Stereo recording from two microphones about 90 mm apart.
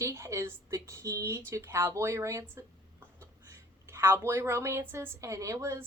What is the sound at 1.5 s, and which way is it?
A woman's voice, 30° right (ahead or behind).